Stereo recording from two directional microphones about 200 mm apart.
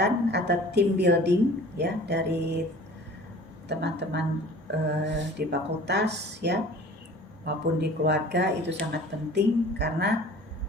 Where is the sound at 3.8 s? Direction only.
60° right (ahead or behind).